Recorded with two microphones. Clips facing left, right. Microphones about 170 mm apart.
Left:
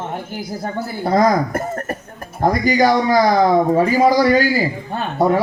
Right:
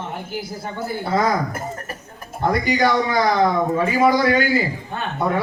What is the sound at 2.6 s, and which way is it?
A man's voice, 40° left (ahead or behind).